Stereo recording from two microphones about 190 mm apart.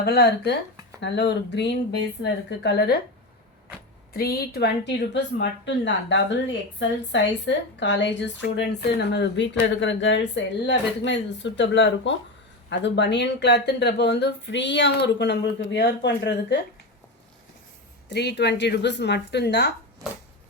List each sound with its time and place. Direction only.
0.0 s speech: 60° left (ahead or behind)
4.1 s speech: 50° left (ahead or behind)
5.1 s a woman's voice: 70° left (ahead or behind)
18.1 s speech: 65° left (ahead or behind)